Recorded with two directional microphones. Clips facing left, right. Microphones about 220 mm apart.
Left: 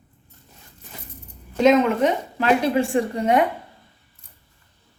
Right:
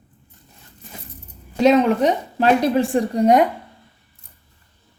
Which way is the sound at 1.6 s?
35° right (ahead or behind).